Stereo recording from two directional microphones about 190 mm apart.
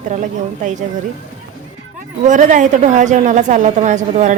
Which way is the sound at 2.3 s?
40° right (ahead or behind).